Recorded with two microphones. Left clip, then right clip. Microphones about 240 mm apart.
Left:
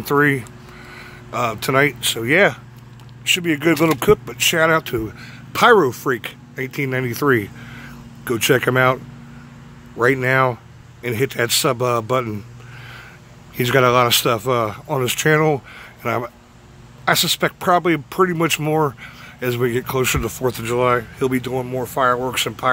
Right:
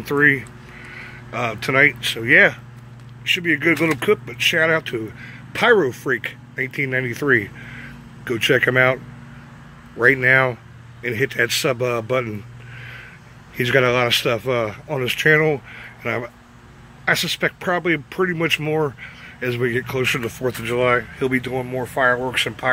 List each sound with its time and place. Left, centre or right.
0.1 s speech: centre
13.6 s speech: centre